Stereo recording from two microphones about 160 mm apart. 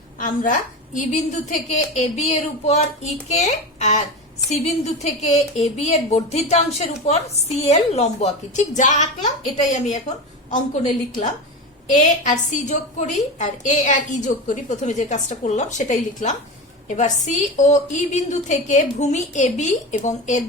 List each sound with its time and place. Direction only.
0.2 s a woman's voice: 55° left (ahead or behind)